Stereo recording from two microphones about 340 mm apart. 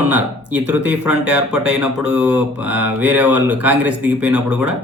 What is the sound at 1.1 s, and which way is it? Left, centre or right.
Speech, right.